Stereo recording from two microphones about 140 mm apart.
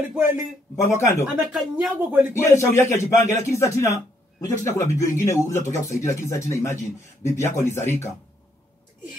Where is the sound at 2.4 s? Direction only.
20° left (ahead or behind).